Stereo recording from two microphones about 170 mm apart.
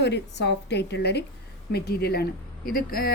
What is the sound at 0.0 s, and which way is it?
A woman's voice, 90° left.